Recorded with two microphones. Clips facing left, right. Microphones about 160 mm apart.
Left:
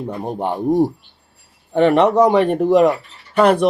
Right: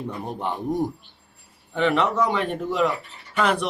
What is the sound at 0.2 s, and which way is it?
Speech, 45° left (ahead or behind).